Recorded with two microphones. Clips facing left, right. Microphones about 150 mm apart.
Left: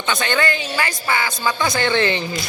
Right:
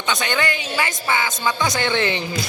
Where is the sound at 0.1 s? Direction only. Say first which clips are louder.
Left 2 dB; 15° right (ahead or behind).